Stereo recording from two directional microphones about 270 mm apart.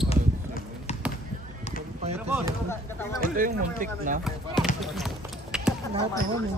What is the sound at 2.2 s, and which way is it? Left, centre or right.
Chop, centre.